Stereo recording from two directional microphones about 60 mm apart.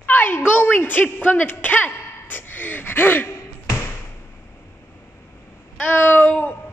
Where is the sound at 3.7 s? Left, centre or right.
Left.